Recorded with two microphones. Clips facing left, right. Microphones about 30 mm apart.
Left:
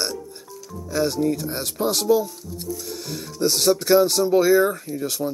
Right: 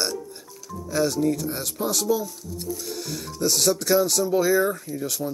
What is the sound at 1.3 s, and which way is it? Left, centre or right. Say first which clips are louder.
Speech: left 1 dB; left.